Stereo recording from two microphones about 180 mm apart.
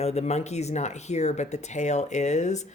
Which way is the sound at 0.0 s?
35° left (ahead or behind).